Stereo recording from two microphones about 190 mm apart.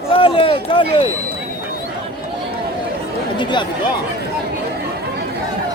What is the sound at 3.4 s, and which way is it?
Speech, 25° left (ahead or behind).